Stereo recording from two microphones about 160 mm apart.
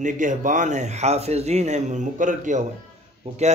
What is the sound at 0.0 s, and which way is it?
Speech, 55° right (ahead or behind).